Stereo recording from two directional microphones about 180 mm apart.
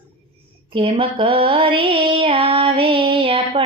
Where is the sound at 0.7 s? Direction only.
30° right (ahead or behind).